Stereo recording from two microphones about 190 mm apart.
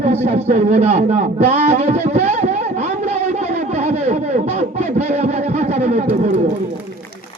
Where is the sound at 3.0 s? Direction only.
35° right (ahead or behind).